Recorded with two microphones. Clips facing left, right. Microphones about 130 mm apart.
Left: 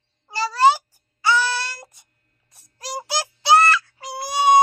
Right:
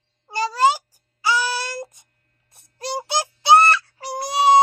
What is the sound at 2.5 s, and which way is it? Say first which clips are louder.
Music: right 4 dB; 25° right (ahead or behind).